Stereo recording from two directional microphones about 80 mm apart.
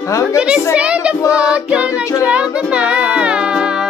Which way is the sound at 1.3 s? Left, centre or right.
Centre.